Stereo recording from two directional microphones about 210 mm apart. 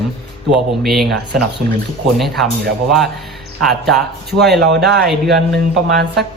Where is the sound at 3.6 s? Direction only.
Centre (ahead or behind).